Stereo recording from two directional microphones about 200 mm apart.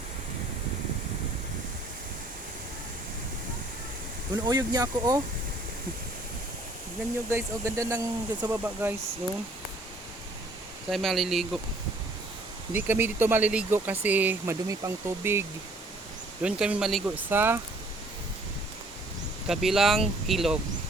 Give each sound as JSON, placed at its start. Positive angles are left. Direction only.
{"t": 4.4, "sound": "speech", "side_deg": -20}
{"t": 7.3, "sound": "speech", "side_deg": -15}
{"t": 10.8, "sound": "speech", "side_deg": 0}
{"t": 12.7, "sound": "speech", "side_deg": -10}
{"t": 19.5, "sound": "speech", "side_deg": 0}